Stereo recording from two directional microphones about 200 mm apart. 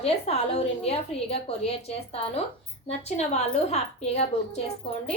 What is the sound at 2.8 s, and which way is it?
A woman's voice, 30° left (ahead or behind).